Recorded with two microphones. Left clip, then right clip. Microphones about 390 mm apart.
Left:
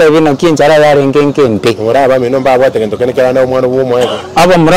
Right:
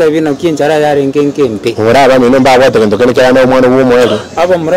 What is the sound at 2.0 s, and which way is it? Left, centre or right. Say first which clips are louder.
Speech: right 5 dB; right.